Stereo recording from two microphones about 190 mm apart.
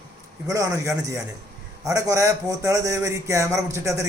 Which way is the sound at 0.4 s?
15° right (ahead or behind).